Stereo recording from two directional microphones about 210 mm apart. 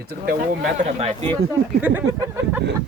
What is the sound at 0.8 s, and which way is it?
Speech, 30° right (ahead or behind).